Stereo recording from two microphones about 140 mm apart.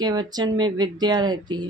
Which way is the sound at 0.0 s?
30° right (ahead or behind).